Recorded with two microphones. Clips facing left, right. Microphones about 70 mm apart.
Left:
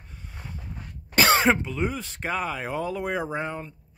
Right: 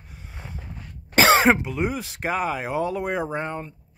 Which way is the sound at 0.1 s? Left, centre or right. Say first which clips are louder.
Right 1 dB; right.